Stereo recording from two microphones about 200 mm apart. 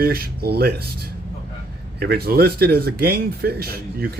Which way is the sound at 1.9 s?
55° right (ahead or behind).